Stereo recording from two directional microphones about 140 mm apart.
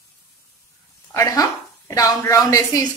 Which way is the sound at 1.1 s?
25° left (ahead or behind).